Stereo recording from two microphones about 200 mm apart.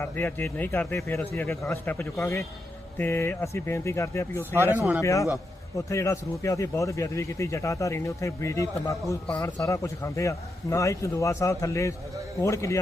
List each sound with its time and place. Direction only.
0.0 s a man's voice: 10° left (ahead or behind)